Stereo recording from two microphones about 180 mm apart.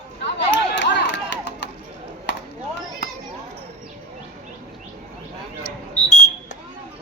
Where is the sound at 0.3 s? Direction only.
80° left.